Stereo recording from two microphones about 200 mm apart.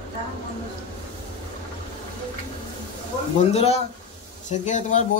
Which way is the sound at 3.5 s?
30° left (ahead or behind).